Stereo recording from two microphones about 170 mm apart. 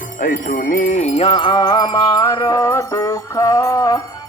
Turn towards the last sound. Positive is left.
turn(degrees=20)  # may be behind; listen again after turning